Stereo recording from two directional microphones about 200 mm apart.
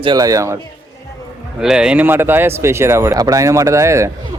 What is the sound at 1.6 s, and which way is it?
Speech, 5° right (ahead or behind).